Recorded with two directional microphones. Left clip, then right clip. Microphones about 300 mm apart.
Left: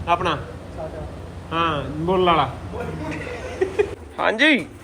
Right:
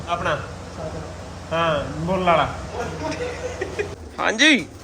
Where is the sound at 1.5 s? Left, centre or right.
Centre.